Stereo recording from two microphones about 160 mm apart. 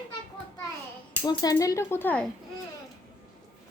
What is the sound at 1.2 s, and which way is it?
Speech, 25° left (ahead or behind).